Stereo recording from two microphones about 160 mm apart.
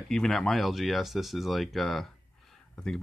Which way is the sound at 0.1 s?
5° left (ahead or behind).